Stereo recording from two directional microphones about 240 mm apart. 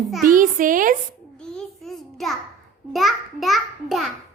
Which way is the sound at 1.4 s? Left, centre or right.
Centre.